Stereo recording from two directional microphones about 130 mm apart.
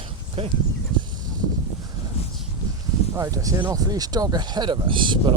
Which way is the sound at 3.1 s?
25° right (ahead or behind).